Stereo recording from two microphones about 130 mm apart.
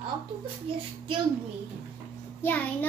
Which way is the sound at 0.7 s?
45° right (ahead or behind).